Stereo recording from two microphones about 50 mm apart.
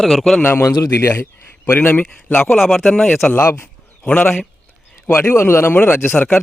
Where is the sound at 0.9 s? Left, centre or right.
Left.